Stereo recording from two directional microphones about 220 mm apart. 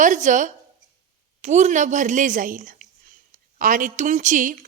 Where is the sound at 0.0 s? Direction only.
35° right (ahead or behind).